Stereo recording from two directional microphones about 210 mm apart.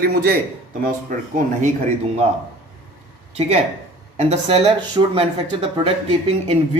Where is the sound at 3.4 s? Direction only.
30° right (ahead or behind).